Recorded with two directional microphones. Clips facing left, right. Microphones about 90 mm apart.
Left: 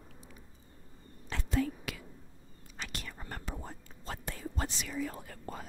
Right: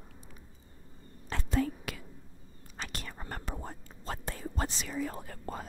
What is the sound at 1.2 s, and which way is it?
Whispering, 40° right (ahead or behind).